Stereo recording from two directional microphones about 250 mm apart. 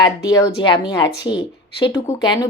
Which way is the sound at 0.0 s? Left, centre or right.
Centre.